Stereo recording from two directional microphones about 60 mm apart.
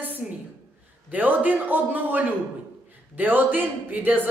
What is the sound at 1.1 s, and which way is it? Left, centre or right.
A woman's voice, right.